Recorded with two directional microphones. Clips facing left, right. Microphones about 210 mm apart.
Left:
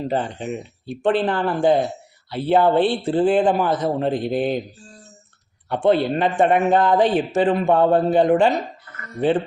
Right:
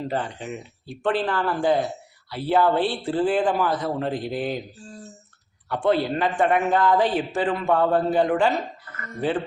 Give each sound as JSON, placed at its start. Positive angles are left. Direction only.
{"t": 0.1, "sound": "speech", "side_deg": 20}
{"t": 5.6, "sound": "speech", "side_deg": 25}